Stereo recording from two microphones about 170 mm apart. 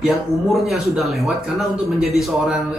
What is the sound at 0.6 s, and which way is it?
Speech, centre (ahead or behind).